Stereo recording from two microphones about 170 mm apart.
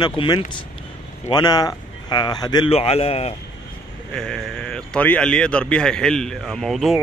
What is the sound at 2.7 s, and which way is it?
Speech, 35° left (ahead or behind).